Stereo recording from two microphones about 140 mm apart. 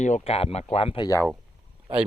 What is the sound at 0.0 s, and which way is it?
Speech, 50° left (ahead or behind).